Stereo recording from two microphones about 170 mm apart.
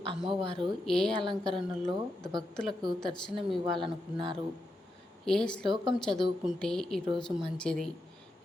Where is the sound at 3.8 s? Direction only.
30° right (ahead or behind).